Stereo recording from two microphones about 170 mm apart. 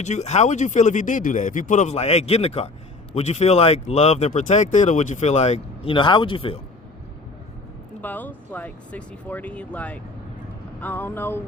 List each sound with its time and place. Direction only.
0.0 s speech: 40° left (ahead or behind)
8.0 s speech: 10° left (ahead or behind)